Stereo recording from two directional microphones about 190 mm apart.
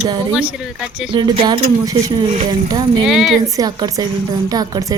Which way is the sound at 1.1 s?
25° right (ahead or behind).